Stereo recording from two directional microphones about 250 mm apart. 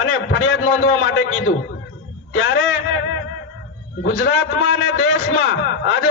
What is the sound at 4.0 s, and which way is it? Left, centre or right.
A man's voice, left.